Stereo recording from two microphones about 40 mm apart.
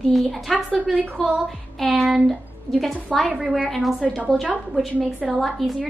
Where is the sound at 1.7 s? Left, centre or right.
Centre.